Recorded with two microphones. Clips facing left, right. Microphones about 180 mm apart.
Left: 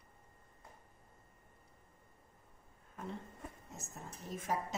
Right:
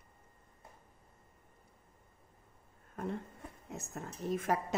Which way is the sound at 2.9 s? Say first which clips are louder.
Right 6 dB; 55° right (ahead or behind).